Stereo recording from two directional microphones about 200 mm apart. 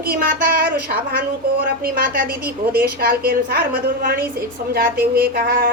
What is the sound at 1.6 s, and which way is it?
A woman's voice, 50° right (ahead or behind).